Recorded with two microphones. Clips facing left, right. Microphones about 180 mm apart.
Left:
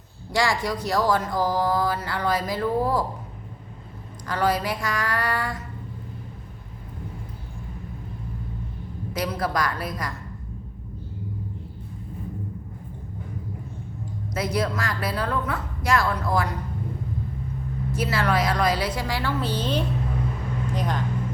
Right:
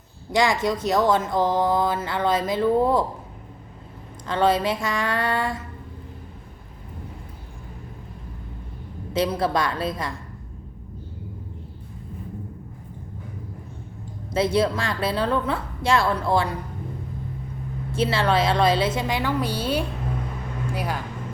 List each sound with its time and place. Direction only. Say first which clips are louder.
0.3 s speech: right 3 dB; 20° right (ahead or behind)
4.3 s speech: right 3 dB; 25° right (ahead or behind)
9.1 s speech: right 4 dB; 25° right (ahead or behind)
14.3 s speech: right 5 dB; 30° right (ahead or behind)
17.9 s speech: right 3 dB; 30° right (ahead or behind); by 21.0 s 10° right (ahead or behind)